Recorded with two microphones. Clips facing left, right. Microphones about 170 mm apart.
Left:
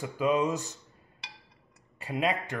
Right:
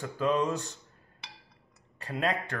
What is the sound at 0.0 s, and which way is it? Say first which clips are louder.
Speech: left 1 dB; 10° left (ahead or behind).